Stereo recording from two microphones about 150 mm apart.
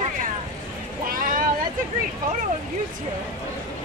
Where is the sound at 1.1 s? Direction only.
65° right (ahead or behind).